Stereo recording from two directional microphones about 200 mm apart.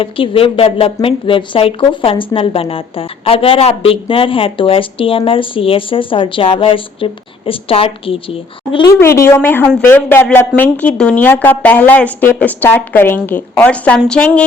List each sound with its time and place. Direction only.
0.0 s a woman's voice: 25° left (ahead or behind); by 14.4 s 5° left (ahead or behind)